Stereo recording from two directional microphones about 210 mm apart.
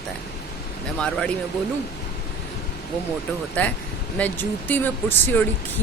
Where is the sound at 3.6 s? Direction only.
5° left (ahead or behind).